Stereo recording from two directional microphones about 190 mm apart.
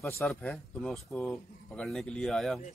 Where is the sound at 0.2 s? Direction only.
5° left (ahead or behind).